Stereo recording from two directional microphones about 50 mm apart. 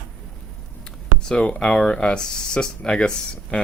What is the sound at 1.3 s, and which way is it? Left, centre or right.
Speech, left.